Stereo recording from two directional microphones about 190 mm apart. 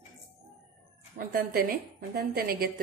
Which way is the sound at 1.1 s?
50° right (ahead or behind).